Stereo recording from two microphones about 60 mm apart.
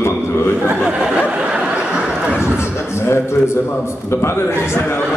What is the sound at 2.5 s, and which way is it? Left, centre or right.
A man's voice, left.